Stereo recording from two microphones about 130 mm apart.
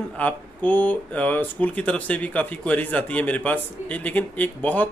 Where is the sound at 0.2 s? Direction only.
15° left (ahead or behind).